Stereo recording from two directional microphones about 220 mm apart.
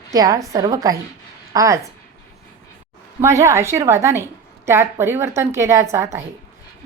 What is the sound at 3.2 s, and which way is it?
A woman's voice, 15° right (ahead or behind).